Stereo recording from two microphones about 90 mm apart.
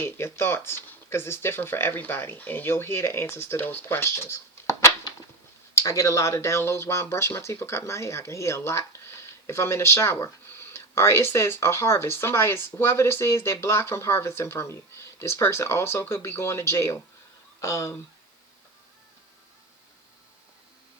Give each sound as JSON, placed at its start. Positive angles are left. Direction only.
{"t": 0.0, "sound": "speech", "side_deg": 30}